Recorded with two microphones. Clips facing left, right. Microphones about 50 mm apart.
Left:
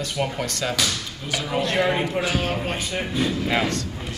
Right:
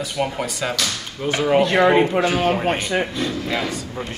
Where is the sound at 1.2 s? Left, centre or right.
Right.